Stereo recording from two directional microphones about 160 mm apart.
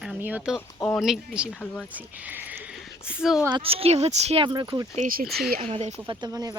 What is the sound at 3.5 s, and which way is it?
Speech, 35° right (ahead or behind).